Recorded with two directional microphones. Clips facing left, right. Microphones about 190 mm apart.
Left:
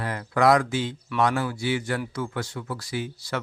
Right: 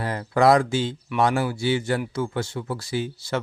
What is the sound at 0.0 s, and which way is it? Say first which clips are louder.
Speech: right 2 dB; 30° right (ahead or behind).